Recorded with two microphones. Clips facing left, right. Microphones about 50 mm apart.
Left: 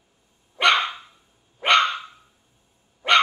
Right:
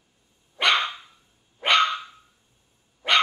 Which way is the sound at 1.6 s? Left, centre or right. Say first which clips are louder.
Left 2 dB; centre.